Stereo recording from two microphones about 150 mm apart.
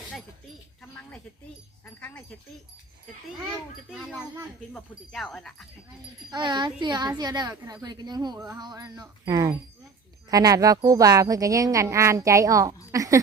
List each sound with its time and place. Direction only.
0.8 s a sound: 5° left (ahead or behind)
1.8 s dog: 10° left (ahead or behind)
4.7 s speech: 5° left (ahead or behind)
6.3 s speech: 30° right (ahead or behind)